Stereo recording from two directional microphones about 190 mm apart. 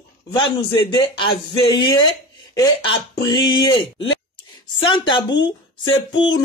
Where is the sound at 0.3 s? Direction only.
25° left (ahead or behind).